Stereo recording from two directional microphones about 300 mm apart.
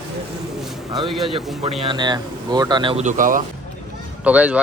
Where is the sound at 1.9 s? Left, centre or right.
Centre.